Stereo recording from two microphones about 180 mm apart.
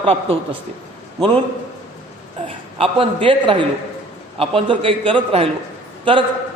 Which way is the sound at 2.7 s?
30° right (ahead or behind).